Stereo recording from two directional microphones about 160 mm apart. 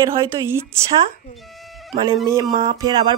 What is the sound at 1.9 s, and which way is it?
A woman's voice, 30° right (ahead or behind).